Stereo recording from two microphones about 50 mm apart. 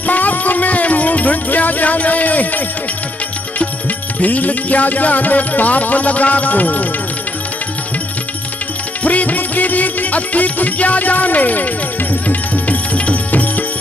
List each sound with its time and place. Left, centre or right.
0.0 s music: left
4.2 s music: left
9.0 s music: left